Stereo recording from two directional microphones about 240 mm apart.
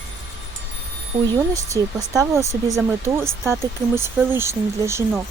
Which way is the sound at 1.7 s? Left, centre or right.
Centre.